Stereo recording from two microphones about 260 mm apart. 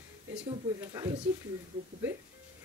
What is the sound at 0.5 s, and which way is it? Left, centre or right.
Speech, centre.